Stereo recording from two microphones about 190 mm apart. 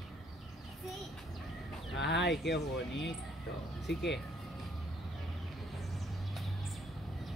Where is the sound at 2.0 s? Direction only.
65° left (ahead or behind).